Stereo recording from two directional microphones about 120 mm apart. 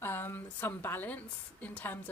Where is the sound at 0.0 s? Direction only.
20° left (ahead or behind).